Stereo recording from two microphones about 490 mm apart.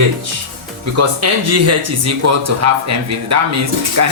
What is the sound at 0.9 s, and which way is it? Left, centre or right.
Speech, right.